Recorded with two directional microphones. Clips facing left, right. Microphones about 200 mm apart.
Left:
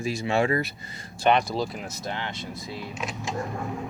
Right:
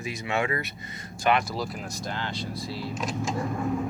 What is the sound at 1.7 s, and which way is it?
Speech, centre (ahead or behind).